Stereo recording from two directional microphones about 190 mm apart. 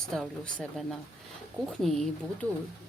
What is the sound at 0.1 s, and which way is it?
Speech, centre (ahead or behind).